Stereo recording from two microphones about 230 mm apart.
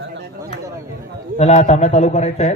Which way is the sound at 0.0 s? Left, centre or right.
Right.